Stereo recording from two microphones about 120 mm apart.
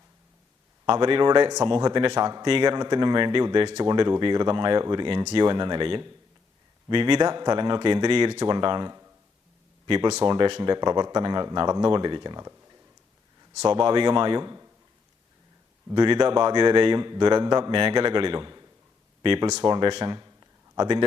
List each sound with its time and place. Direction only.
0.9 s a man's voice: 45° right (ahead or behind)
13.7 s a man's voice: 45° right (ahead or behind)
16.0 s a man's voice: 40° right (ahead or behind)
19.2 s a man's voice: 45° right (ahead or behind)
20.1 s a sound: 30° right (ahead or behind)